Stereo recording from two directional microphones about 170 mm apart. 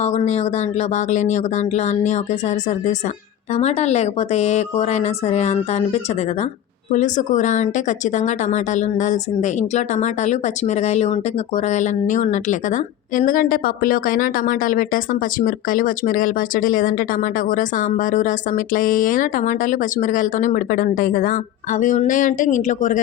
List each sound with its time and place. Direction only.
0.0 s a woman's voice: 40° left (ahead or behind)